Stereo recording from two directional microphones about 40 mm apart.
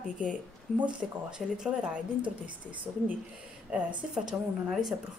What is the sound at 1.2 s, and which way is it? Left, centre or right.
Speech, centre.